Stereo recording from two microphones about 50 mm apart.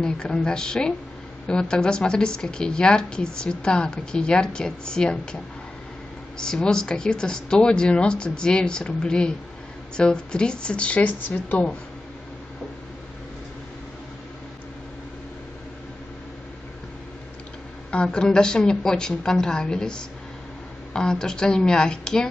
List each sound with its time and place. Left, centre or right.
0.0 s a woman's voice: centre; by 11.6 s left
17.9 s a woman's voice: centre